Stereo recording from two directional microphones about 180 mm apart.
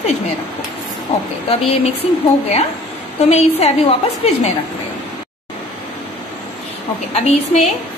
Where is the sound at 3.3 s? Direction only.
35° left (ahead or behind).